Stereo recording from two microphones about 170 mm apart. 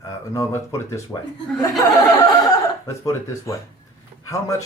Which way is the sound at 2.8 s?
20° left (ahead or behind).